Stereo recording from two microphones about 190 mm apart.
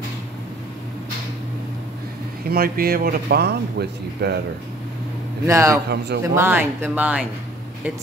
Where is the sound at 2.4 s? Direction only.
50° right (ahead or behind).